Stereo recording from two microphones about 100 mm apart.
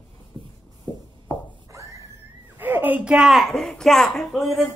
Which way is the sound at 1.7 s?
35° right (ahead or behind).